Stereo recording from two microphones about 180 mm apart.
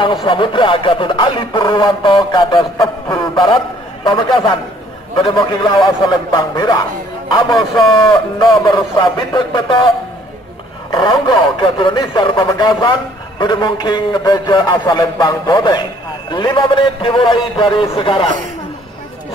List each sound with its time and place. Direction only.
0.0 s a man's voice: 30° left (ahead or behind)
10.9 s a man's voice: 25° left (ahead or behind)